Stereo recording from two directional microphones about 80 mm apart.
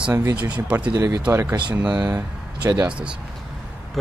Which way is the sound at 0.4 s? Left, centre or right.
Centre.